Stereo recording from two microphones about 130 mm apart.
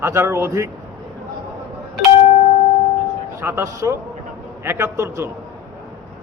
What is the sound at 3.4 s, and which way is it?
Speech, 20° right (ahead or behind).